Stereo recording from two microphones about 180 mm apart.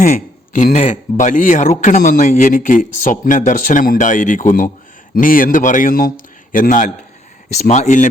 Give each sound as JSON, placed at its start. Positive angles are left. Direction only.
{"t": 0.0, "sound": "speech", "side_deg": 45}